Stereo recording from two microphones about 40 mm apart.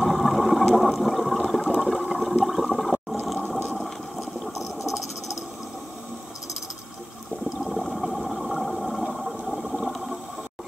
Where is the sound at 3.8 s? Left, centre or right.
Centre.